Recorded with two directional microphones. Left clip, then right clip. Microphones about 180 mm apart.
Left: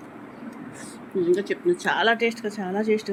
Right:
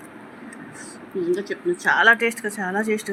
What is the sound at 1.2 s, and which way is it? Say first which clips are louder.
Speech: left 2 dB; 10° left (ahead or behind).